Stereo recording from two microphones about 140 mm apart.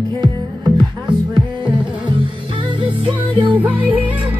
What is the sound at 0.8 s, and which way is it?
Music, 30° right (ahead or behind).